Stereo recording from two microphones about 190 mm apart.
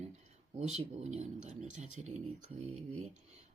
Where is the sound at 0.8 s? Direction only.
35° right (ahead or behind).